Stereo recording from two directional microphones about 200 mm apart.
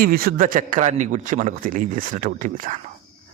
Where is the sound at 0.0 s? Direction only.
45° right (ahead or behind).